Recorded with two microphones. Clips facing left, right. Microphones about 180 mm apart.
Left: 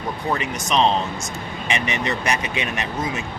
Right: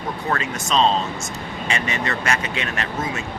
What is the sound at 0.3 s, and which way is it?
Speech, 15° left (ahead or behind).